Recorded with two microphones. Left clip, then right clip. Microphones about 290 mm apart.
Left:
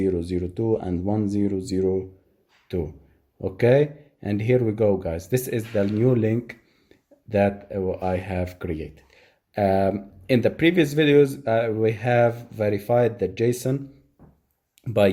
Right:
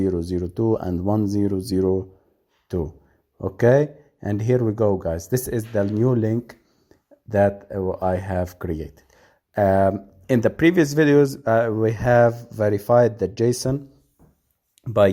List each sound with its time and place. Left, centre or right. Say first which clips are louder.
0.0 s a man's voice: right 1 dB; right
9.6 s speech: right 3 dB; right
14.8 s speech: right 3 dB; centre